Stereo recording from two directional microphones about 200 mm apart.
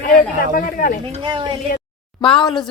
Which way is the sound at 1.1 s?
25° right (ahead or behind).